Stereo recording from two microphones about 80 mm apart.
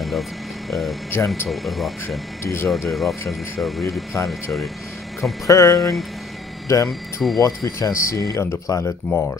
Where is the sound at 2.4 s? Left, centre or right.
Left.